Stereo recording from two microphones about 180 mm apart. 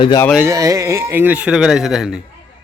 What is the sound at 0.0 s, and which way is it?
Speech, 25° left (ahead or behind).